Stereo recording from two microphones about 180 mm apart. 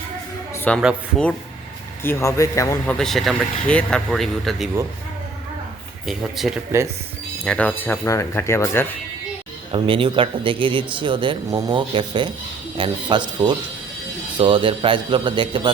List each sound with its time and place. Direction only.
0.5 s music: 10° left (ahead or behind)
2.0 s speech: 15° left (ahead or behind)
2.8 s speech: centre (ahead or behind)
6.1 s speech: centre (ahead or behind); by 8.9 s 15° left (ahead or behind)
9.7 s speech: 30° right (ahead or behind)